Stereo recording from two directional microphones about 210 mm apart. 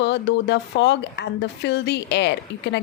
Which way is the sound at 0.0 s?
55° left (ahead or behind).